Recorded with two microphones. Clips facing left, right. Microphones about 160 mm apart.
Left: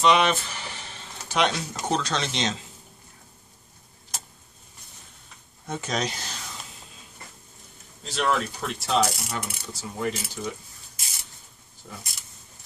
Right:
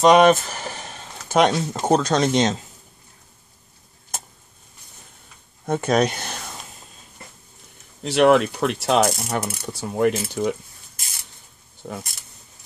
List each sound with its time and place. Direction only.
0.0 s speech: 45° right (ahead or behind)
4.1 s vehicle: 50° right (ahead or behind)
5.7 s speech: 55° right (ahead or behind)
8.0 s mechanisms: 70° right (ahead or behind)
11.8 s mechanisms: 60° right (ahead or behind)